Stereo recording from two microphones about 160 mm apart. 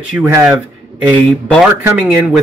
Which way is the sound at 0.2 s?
15° right (ahead or behind).